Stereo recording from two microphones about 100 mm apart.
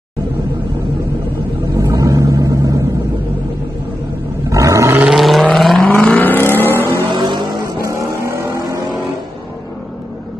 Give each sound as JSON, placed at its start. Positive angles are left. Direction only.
{"t": 1.8, "sound": "vehicle", "side_deg": -30}
{"t": 4.5, "sound": "roar", "side_deg": -35}
{"t": 5.0, "sound": "vehicle", "side_deg": 0}
{"t": 5.9, "sound": "vehicle", "side_deg": 10}
{"t": 7.2, "sound": "vehicle", "side_deg": -50}
{"t": 7.8, "sound": "vehicle", "side_deg": -30}